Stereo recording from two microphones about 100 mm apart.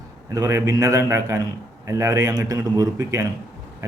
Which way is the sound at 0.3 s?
35° right (ahead or behind).